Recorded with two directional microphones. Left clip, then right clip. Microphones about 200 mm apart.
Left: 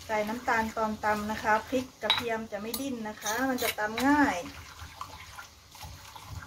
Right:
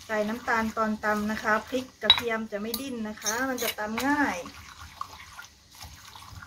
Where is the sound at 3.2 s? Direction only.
10° right (ahead or behind).